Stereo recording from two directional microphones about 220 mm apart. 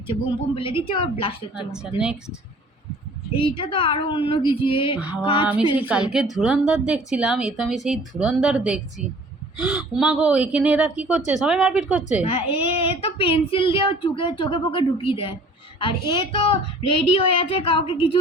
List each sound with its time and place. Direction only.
0.5 s a woman's voice: 25° left (ahead or behind)
1.5 s a woman's voice: 5° right (ahead or behind)
3.3 s a woman's voice: 25° left (ahead or behind)
5.8 s a woman's voice: 5° right (ahead or behind)
12.2 s a woman's voice: 25° left (ahead or behind)